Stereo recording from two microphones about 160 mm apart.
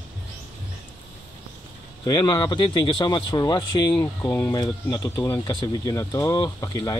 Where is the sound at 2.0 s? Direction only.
25° left (ahead or behind).